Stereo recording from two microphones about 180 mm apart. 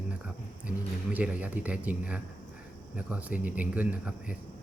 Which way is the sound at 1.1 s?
10° right (ahead or behind).